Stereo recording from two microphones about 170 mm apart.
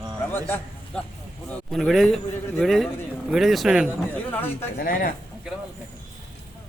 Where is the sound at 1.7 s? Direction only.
Centre (ahead or behind).